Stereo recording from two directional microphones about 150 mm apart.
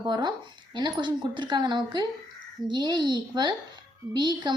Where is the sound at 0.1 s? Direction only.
30° right (ahead or behind).